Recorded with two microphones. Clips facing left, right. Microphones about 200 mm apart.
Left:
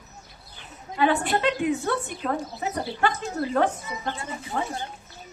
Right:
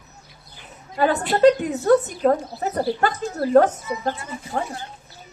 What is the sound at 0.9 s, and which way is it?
A woman's voice, 40° right (ahead or behind).